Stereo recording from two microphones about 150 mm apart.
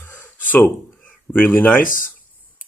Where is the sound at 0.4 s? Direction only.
10° left (ahead or behind).